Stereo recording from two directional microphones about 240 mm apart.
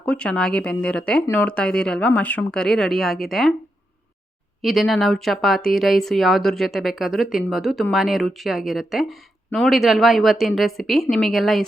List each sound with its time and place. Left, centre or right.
0.0 s speech: centre
4.6 s speech: centre